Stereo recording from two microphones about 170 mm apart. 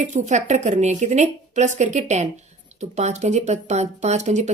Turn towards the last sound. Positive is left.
turn(degrees=-45)  # may be behind; listen again after turning